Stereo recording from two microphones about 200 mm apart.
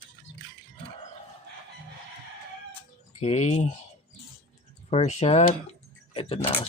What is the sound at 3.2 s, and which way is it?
Speech, 35° left (ahead or behind).